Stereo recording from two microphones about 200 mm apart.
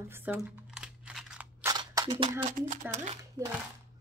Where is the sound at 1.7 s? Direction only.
20° right (ahead or behind).